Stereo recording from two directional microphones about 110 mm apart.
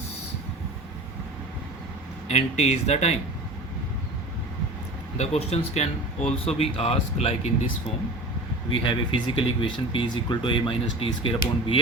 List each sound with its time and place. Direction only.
2.2 s speech: 90° left
5.1 s speech: 85° left
6.6 s speech: 65° left (ahead or behind)
8.7 s speech: 50° left (ahead or behind)